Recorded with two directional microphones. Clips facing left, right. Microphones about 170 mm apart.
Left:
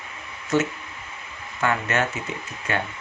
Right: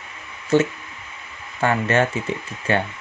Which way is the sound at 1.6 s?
30° right (ahead or behind).